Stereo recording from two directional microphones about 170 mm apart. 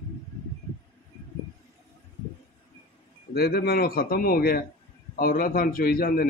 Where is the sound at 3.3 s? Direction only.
65° left (ahead or behind).